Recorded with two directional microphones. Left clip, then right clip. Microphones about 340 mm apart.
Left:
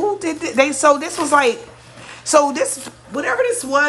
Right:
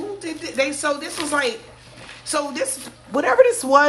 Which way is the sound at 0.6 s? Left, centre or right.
Centre.